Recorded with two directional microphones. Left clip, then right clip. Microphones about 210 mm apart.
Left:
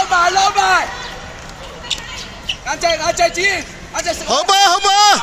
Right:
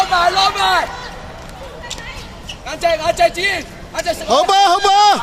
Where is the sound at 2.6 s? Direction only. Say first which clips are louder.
Right 1 dB; 70° right (ahead or behind).